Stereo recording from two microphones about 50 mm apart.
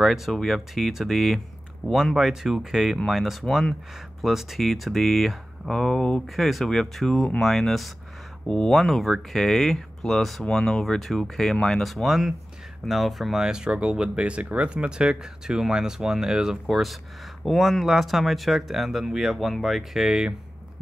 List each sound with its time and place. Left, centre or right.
0.0 s speech: centre
6.2 s speech: centre
8.5 s speech: centre
13.4 s speech: centre